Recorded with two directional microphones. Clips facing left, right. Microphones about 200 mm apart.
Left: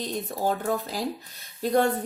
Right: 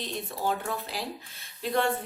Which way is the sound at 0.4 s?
40° left (ahead or behind).